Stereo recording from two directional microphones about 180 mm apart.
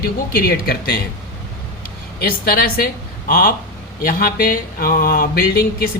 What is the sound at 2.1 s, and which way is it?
Speech, 55° left (ahead or behind).